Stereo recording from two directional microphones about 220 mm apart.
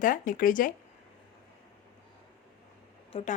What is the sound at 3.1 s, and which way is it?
Speech, 25° left (ahead or behind).